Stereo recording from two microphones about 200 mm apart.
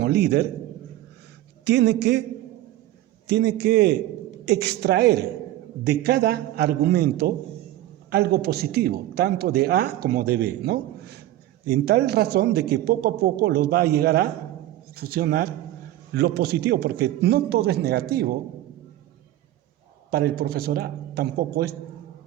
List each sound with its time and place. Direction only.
0.0 s a man's voice: 55° right (ahead or behind)
1.6 s a man's voice: 60° right (ahead or behind)
3.2 s a man's voice: 60° right (ahead or behind)
20.1 s speech: 50° right (ahead or behind)